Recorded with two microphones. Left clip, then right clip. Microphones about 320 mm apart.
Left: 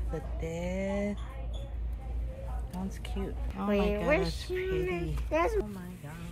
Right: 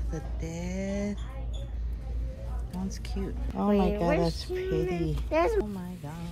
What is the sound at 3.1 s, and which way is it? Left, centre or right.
A woman's voice, centre.